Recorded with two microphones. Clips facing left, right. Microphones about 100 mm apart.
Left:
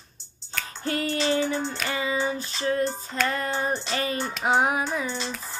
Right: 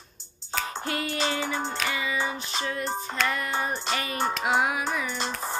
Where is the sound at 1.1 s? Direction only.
45° right (ahead or behind).